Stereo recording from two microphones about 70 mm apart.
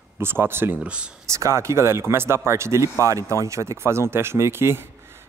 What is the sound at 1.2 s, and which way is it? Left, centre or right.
A man's voice, right.